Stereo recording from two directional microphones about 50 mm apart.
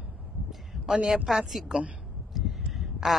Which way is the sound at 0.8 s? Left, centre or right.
Centre.